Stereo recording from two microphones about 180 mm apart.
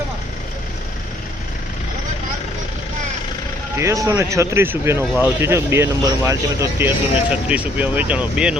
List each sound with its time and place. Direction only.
3.8 s speech: 15° right (ahead or behind)